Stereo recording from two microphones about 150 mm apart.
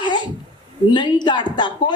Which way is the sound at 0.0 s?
30° left (ahead or behind).